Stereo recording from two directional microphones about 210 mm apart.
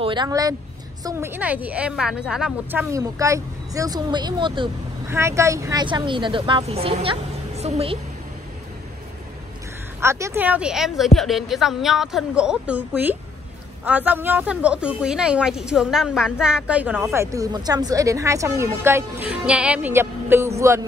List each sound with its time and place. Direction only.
0.0 s speech: 20° right (ahead or behind)
9.9 s speech: 15° right (ahead or behind)